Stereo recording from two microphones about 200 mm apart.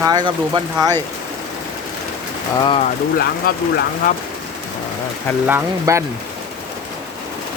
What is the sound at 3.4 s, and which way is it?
Speech, 45° left (ahead or behind).